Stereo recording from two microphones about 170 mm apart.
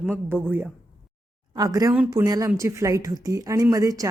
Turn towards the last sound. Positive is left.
turn(degrees=-20)  # may be behind; listen again after turning